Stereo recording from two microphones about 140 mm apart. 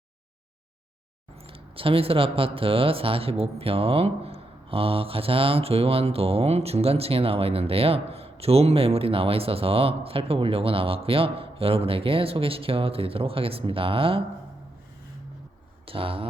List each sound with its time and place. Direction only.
1.5 s speech: 40° right (ahead or behind)
15.9 s speech: 40° right (ahead or behind)